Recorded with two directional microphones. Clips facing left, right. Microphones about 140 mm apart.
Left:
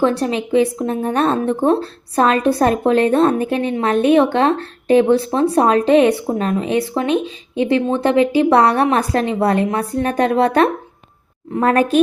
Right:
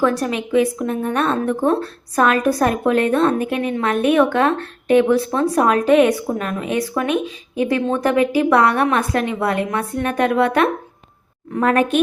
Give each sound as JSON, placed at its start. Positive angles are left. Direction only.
{"t": 0.0, "sound": "a woman's voice", "side_deg": 30}